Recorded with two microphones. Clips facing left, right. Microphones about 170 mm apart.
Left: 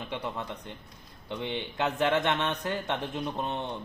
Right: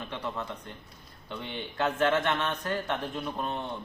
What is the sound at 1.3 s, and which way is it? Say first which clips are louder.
Speech: left 4 dB; 20° left (ahead or behind).